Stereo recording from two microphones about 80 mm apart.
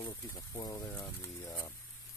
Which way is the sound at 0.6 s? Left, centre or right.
Left.